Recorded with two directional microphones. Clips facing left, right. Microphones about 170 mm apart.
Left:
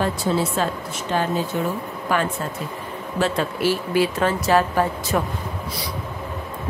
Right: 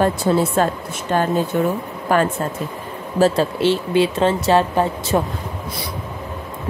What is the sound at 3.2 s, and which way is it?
Speech, 30° right (ahead or behind).